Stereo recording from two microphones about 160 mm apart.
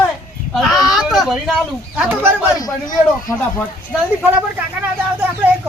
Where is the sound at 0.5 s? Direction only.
Centre (ahead or behind).